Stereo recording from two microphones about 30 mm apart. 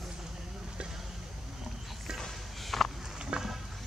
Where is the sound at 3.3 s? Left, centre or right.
Right.